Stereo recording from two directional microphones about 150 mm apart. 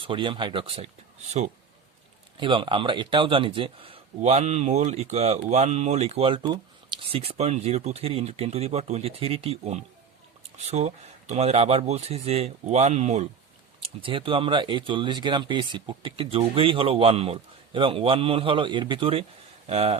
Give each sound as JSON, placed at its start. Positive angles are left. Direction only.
{"t": 0.0, "sound": "speech", "side_deg": -35}
{"t": 2.4, "sound": "speech", "side_deg": -35}
{"t": 13.8, "sound": "speech", "side_deg": -35}